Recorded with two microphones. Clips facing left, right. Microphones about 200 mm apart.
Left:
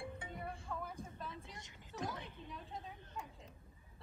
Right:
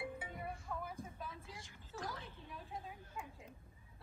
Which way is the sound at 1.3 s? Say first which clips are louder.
Left 1 dB; 20° left (ahead or behind).